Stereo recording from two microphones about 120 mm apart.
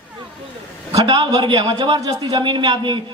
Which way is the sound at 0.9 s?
35° right (ahead or behind).